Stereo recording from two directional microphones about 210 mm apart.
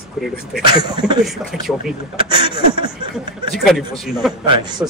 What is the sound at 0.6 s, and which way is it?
Speech, 20° right (ahead or behind).